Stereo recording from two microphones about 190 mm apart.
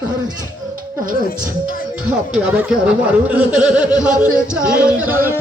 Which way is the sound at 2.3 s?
5° right (ahead or behind).